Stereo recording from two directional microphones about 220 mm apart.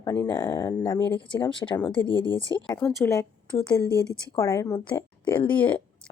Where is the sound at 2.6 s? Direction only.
10° left (ahead or behind).